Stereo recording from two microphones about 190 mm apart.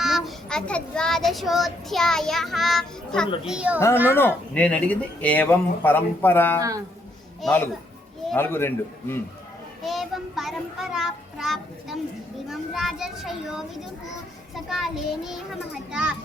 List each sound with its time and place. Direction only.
0.0 s a child's voice: centre (ahead or behind)
4.1 s speech: 10° left (ahead or behind)
6.6 s a man's voice: 20° right (ahead or behind)
7.4 s speech: 10° left (ahead or behind)
9.8 s a child's voice: centre (ahead or behind)